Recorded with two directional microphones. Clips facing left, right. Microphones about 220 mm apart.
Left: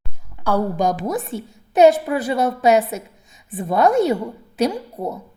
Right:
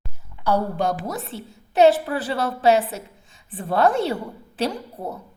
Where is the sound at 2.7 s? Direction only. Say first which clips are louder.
Left 3 dB; 40° left (ahead or behind).